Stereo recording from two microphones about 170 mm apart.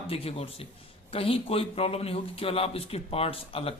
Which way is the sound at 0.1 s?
35° left (ahead or behind).